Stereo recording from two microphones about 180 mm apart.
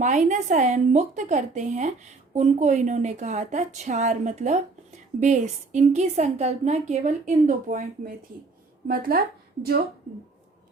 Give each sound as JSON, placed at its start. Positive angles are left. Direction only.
{"t": 0.0, "sound": "a woman's voice", "side_deg": -45}